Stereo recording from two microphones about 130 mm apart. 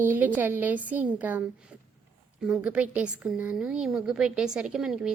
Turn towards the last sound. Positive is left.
turn(degrees=-5)  # may be behind; listen again after turning